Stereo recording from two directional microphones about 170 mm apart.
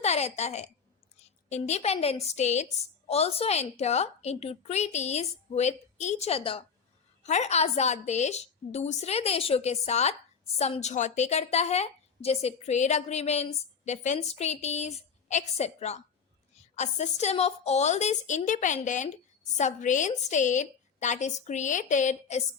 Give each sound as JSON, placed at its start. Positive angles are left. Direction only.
{"t": 0.0, "sound": "a woman's voice", "side_deg": 40}